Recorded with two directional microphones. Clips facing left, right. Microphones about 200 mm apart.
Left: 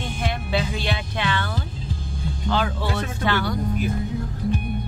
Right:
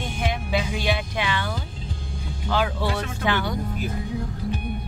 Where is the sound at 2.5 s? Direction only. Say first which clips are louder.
Right 1 dB; 10° right (ahead or behind).